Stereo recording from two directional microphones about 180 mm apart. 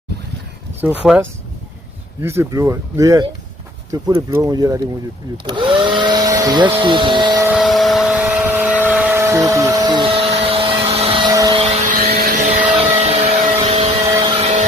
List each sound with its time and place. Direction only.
0.8 s speech: 5° right (ahead or behind)
3.9 s vacuum cleaner: 20° right (ahead or behind)
7.4 s vehicle: 5° right (ahead or behind); by 11.6 s 20° right (ahead or behind)
11.6 s vehicle: 35° right (ahead or behind)
11.9 s vehicle: 55° right (ahead or behind)
12.5 s vehicle: 45° right (ahead or behind)
13.0 s vacuum cleaner: 35° right (ahead or behind)
13.6 s a sound: 35° right (ahead or behind)
14.3 s vehicle: 35° right (ahead or behind)